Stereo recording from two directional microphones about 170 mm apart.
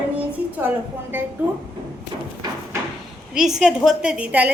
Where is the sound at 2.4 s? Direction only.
25° right (ahead or behind).